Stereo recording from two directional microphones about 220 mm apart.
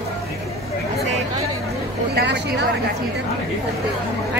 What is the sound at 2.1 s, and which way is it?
Speech, 50° right (ahead or behind).